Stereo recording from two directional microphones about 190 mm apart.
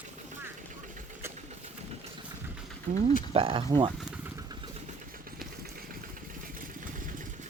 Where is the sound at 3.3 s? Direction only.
30° right (ahead or behind).